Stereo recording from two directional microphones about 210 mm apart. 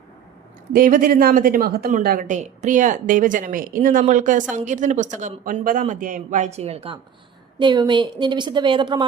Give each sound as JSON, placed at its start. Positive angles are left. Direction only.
{"t": 0.7, "sound": "a woman's voice", "side_deg": -40}